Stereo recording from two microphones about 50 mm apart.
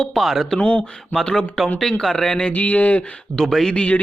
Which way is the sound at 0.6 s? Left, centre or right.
Left.